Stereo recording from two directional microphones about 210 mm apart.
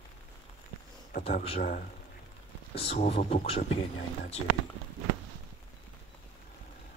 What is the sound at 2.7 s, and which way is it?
Speech, 30° left (ahead or behind).